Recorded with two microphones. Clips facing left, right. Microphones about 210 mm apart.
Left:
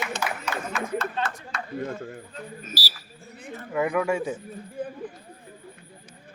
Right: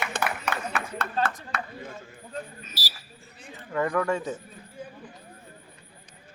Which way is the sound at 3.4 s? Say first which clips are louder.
Left 7 dB; 55° left (ahead or behind).